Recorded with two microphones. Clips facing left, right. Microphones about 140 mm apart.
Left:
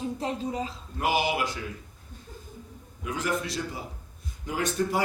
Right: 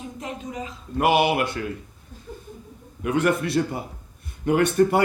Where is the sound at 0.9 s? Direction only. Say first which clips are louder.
Right 7 dB; 65° right (ahead or behind).